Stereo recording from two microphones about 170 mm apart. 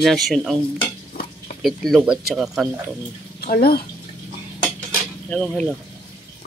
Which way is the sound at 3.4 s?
65° left (ahead or behind).